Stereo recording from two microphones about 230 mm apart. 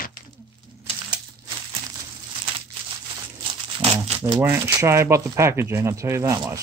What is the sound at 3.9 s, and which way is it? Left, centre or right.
Speech, centre.